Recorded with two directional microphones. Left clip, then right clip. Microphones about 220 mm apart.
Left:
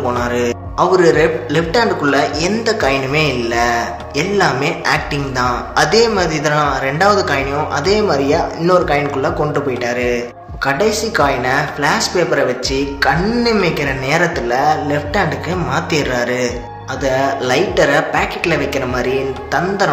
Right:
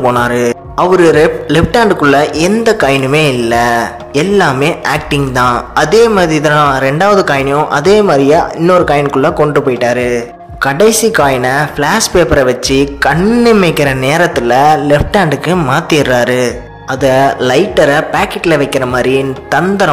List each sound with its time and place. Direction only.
0.1 s a man's voice: 35° right (ahead or behind)